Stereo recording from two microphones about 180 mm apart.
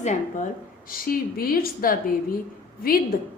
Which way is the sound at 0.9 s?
55° left (ahead or behind).